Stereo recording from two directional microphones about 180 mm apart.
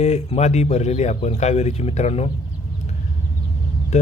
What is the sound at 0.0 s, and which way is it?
Speech, 40° left (ahead or behind).